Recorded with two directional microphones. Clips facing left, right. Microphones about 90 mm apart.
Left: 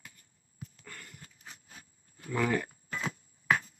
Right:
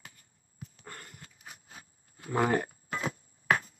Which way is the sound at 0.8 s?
40° right (ahead or behind).